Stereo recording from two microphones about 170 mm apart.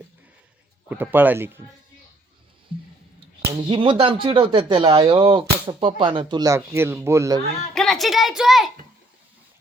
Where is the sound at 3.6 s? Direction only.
30° right (ahead or behind).